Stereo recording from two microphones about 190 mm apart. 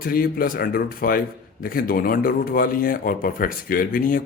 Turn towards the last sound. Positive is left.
turn(degrees=50)  # may be behind; listen again after turning